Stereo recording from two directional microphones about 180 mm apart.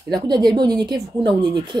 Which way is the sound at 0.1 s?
25° right (ahead or behind).